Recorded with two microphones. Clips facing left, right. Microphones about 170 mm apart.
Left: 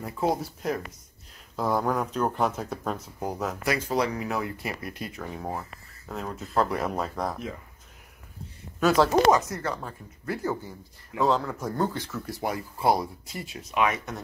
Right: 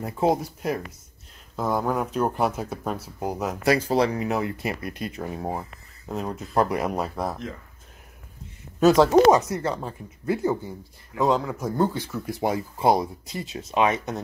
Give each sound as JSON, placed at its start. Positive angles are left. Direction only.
{"t": 0.0, "sound": "speech", "side_deg": -20}
{"t": 1.6, "sound": "speech", "side_deg": 0}
{"t": 3.6, "sound": "speech", "side_deg": -30}
{"t": 8.7, "sound": "speech", "side_deg": -20}